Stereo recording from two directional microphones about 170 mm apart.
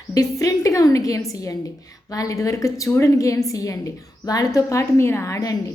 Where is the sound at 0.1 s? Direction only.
20° left (ahead or behind).